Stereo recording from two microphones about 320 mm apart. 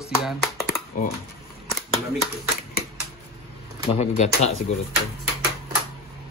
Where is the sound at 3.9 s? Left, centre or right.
Centre.